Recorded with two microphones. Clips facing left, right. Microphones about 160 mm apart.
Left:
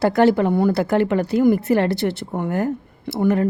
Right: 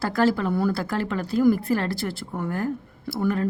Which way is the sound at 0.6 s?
70° left (ahead or behind).